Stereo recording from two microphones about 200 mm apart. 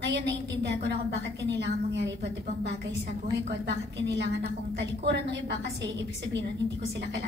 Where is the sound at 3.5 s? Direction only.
60° right (ahead or behind).